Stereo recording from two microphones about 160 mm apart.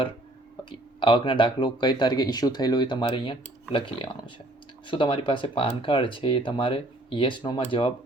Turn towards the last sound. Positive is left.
turn(degrees=30)  # may be behind; listen again after turning